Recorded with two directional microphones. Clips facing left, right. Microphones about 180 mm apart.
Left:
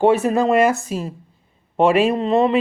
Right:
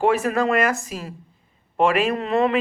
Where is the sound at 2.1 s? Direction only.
20° left (ahead or behind).